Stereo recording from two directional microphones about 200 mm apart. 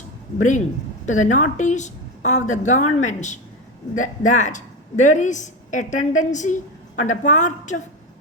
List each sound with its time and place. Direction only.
0.3 s a woman's voice: 40° left (ahead or behind)